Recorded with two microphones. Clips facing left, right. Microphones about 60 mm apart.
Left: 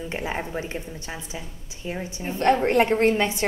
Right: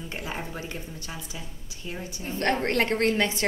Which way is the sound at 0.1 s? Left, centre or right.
Left.